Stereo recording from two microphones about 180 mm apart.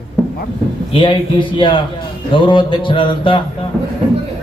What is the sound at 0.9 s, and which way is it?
A man's voice, 30° left (ahead or behind).